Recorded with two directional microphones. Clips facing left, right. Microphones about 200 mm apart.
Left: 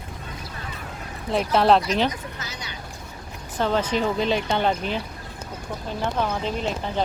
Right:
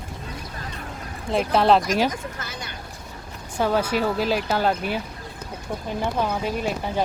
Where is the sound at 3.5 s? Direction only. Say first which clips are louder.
Right 1 dB; 10° right (ahead or behind).